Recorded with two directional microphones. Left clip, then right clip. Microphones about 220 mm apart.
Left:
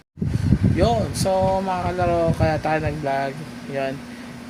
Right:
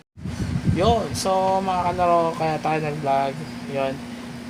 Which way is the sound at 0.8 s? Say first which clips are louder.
Right 1 dB; 5° left (ahead or behind).